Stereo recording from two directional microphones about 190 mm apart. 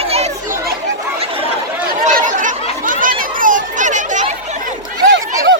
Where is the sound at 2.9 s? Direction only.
45° right (ahead or behind).